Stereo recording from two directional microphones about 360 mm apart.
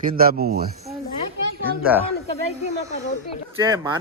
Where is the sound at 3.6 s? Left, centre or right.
Centre.